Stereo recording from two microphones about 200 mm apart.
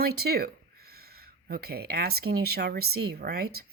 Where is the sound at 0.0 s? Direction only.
50° right (ahead or behind).